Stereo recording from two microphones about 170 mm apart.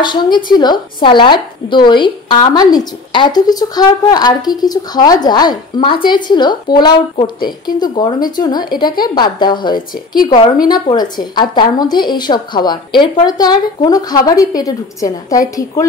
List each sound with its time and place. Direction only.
0.0 s speech: 25° left (ahead or behind)